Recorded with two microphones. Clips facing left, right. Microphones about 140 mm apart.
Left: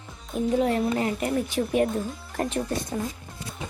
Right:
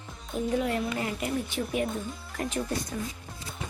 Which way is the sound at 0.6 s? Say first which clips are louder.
Left 7 dB; 30° left (ahead or behind).